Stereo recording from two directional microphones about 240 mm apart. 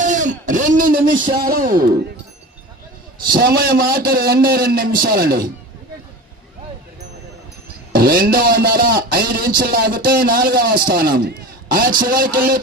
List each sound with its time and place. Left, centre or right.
0.0 s speech: right
3.3 s speech: right
7.9 s speech: right